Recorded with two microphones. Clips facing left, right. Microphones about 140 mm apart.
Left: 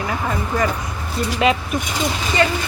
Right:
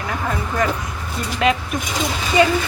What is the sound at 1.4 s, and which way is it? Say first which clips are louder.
Speech: left 1 dB; 5° left (ahead or behind).